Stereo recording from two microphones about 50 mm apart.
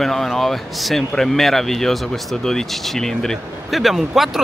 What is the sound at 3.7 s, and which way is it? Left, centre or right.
Speech, centre.